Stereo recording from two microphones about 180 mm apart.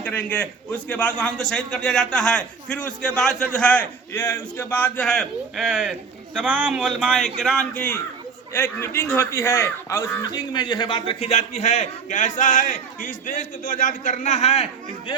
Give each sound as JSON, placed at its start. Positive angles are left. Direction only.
{"t": 0.0, "sound": "a man's voice", "side_deg": 10}